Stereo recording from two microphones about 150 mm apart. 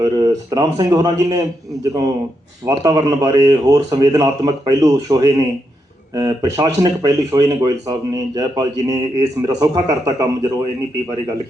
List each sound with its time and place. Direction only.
0.0 s speech: 25° right (ahead or behind)